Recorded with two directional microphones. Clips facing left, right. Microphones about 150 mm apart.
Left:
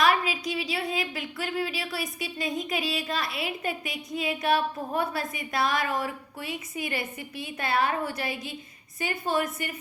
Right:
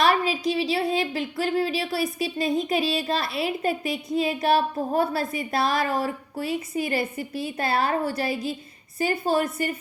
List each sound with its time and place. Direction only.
0.0 s a woman's voice: 35° right (ahead or behind)